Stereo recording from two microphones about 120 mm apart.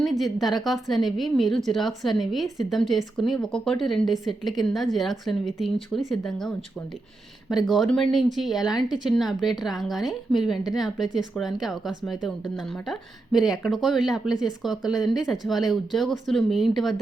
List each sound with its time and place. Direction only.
0.0 s speech: centre (ahead or behind)
7.5 s speech: centre (ahead or behind)